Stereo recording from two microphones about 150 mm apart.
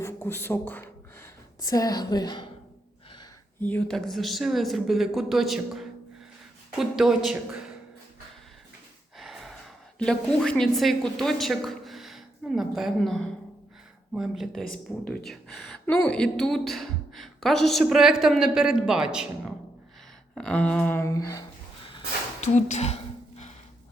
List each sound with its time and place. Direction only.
0.0 s speech: 15° left (ahead or behind)
3.6 s a woman's voice: 10° left (ahead or behind)
9.1 s a woman's voice: centre (ahead or behind)
20.3 s a sound: 5° left (ahead or behind)
22.4 s speech: 50° left (ahead or behind)